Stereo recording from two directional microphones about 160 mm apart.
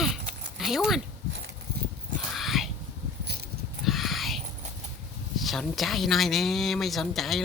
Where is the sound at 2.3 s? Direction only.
Centre (ahead or behind).